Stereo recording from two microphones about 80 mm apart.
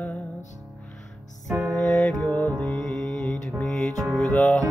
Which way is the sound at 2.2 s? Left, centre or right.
Left.